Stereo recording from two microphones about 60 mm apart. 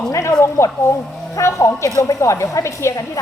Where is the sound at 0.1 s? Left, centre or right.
Left.